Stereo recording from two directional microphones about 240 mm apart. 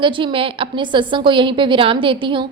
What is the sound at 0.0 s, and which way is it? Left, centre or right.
A woman's voice, right.